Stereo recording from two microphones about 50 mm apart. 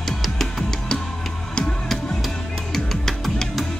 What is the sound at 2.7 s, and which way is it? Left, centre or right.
Music, centre.